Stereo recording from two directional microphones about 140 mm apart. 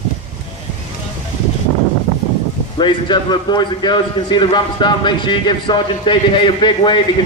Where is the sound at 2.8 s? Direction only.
30° left (ahead or behind).